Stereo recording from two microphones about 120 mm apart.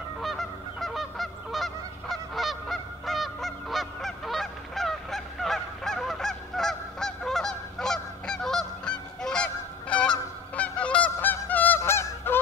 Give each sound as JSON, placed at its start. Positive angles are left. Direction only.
{"t": 0.2, "sound": "goose", "side_deg": 0}